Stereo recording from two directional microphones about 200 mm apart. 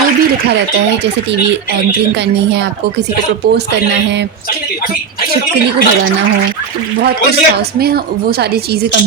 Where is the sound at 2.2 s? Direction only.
60° right (ahead or behind).